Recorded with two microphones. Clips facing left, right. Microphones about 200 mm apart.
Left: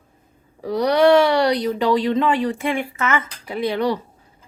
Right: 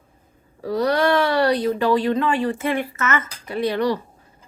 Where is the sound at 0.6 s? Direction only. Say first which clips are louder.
Left 4 dB; 15° left (ahead or behind).